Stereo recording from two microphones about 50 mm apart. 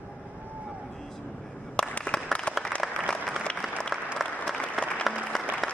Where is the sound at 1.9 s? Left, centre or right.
Centre.